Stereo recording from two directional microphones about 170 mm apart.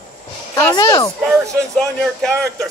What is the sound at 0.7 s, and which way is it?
Speech, 25° left (ahead or behind).